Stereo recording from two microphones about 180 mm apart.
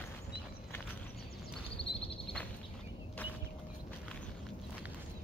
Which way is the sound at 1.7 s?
30° left (ahead or behind).